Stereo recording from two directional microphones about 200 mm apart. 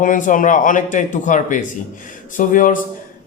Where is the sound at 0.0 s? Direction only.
40° left (ahead or behind).